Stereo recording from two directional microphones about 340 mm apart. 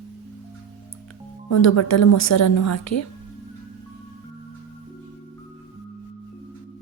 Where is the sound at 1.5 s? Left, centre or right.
Left.